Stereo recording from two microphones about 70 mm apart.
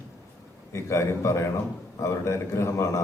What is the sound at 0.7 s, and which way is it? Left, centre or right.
A man's voice, left.